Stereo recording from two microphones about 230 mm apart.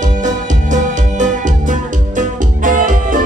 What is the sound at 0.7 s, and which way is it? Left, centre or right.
Music, right.